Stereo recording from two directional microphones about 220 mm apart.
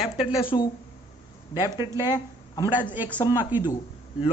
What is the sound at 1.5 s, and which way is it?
Speech, 10° right (ahead or behind).